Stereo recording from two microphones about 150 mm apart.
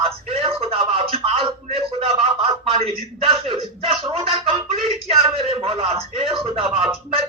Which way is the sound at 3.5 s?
40° right (ahead or behind).